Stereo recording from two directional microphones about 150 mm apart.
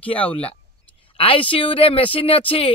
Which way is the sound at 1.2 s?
35° left (ahead or behind).